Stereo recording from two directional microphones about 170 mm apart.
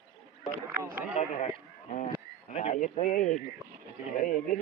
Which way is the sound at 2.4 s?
45° left (ahead or behind).